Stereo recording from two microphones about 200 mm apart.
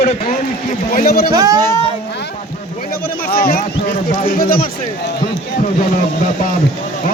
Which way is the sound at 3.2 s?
50° left (ahead or behind).